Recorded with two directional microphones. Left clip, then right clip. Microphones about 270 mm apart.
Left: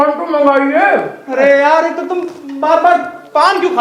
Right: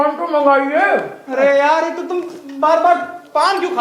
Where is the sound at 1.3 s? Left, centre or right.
Right.